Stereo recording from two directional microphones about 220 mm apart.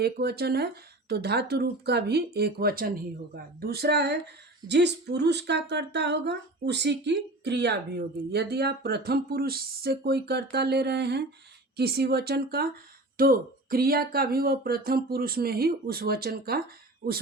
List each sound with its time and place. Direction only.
0.0 s speech: 45° right (ahead or behind)